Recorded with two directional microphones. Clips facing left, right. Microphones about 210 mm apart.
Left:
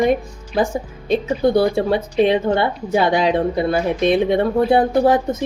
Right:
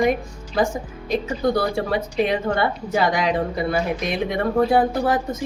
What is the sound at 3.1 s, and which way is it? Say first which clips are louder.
A woman's voice: left 5 dB; 30° left (ahead or behind).